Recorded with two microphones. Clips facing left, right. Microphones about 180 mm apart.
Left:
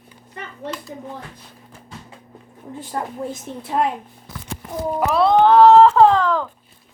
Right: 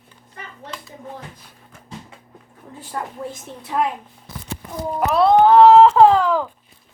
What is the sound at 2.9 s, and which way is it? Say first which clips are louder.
Speech: left 2 dB; 30° left (ahead or behind).